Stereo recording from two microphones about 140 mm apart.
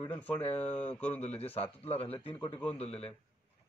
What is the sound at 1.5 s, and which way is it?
Speech, 45° left (ahead or behind).